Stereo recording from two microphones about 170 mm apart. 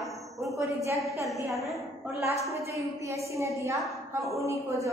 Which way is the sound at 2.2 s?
15° right (ahead or behind).